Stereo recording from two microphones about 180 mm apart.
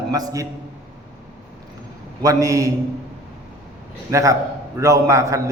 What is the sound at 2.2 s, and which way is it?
Speech, 20° right (ahead or behind).